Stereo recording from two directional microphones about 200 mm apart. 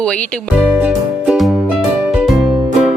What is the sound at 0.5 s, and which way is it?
Music, 5° right (ahead or behind).